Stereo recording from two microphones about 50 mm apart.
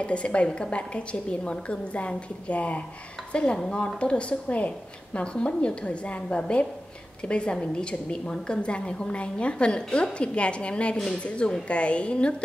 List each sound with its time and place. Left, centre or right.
0.0 s a woman's voice: left
3.5 s a woman's voice: centre